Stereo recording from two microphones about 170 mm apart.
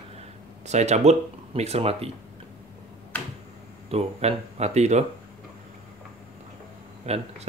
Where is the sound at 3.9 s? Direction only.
35° right (ahead or behind).